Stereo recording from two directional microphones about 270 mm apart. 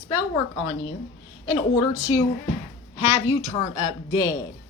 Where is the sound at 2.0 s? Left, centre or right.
Centre.